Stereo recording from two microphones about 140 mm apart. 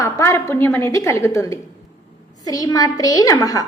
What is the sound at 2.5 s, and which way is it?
A woman's voice, 25° left (ahead or behind).